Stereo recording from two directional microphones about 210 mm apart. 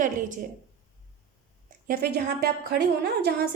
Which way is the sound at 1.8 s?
45° right (ahead or behind).